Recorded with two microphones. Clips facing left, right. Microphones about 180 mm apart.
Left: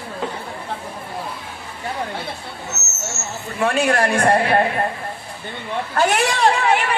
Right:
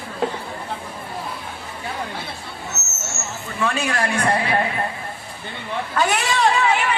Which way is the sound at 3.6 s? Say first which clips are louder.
Left 5 dB; 60° left (ahead or behind).